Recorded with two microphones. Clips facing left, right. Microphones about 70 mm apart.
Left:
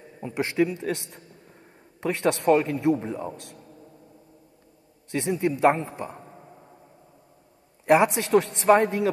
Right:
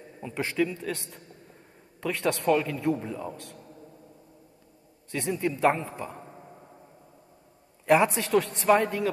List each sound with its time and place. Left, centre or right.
0.2 s a man's voice: centre
5.1 s a man's voice: left
7.8 s a man's voice: left